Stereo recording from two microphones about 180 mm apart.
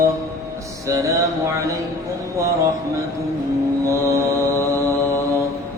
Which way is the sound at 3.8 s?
15° right (ahead or behind).